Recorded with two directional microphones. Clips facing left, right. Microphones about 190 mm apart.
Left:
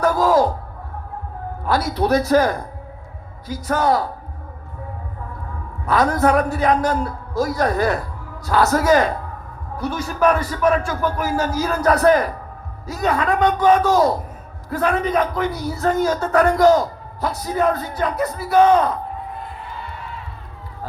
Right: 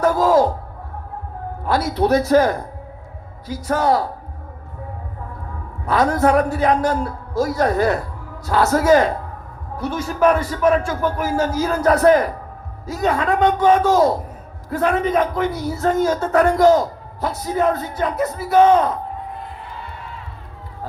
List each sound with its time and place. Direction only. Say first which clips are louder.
0.0 s a sound: right 1 dB; 25° right (ahead or behind)
1.6 s a man's voice: right 1 dB; 25° right (ahead or behind)
5.8 s a man's voice: right 1 dB; 25° right (ahead or behind)